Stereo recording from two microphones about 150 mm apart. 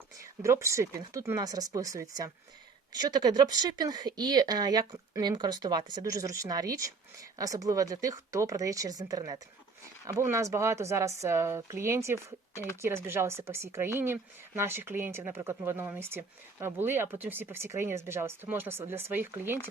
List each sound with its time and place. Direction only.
0.4 s speech: 20° right (ahead or behind)